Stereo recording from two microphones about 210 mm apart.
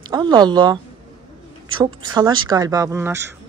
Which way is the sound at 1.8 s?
20° right (ahead or behind).